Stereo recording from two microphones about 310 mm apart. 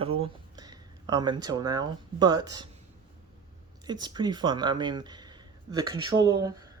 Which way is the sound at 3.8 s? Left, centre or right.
Centre.